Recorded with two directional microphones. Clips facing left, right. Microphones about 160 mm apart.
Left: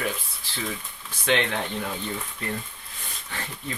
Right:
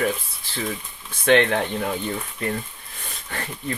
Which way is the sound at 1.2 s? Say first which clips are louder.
Right 7 dB; 55° right (ahead or behind).